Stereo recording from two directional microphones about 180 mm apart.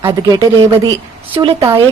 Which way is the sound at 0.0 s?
20° right (ahead or behind).